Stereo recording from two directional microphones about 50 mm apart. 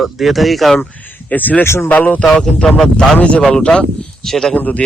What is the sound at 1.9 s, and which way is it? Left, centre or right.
Speech, left.